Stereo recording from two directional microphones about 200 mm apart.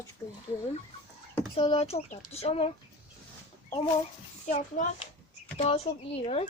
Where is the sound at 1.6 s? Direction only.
30° left (ahead or behind).